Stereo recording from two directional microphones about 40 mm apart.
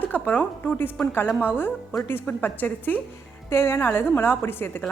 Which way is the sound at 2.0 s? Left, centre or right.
Left.